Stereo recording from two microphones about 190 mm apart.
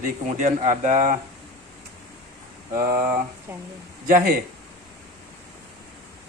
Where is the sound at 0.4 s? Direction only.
40° right (ahead or behind).